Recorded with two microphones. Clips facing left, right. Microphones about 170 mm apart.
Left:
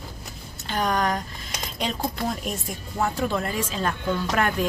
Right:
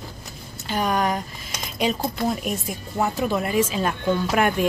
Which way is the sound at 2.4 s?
5° right (ahead or behind).